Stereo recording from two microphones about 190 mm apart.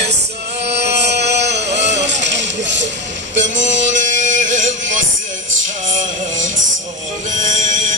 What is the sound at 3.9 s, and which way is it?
Music, 40° right (ahead or behind).